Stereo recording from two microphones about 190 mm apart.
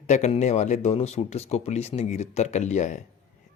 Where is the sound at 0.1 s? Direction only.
35° left (ahead or behind).